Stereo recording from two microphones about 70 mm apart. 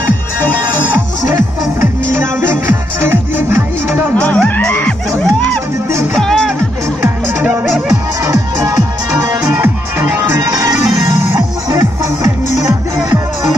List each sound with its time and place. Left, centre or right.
1.3 s music: right
4.1 s music: centre
6.1 s music: centre
9.5 s music: right